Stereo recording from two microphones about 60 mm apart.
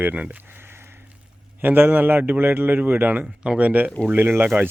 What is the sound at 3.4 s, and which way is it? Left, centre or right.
Speech, centre.